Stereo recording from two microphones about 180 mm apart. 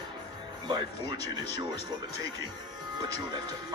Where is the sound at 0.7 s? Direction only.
25° right (ahead or behind).